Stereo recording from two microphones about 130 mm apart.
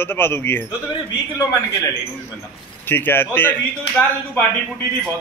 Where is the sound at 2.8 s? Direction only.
15° left (ahead or behind).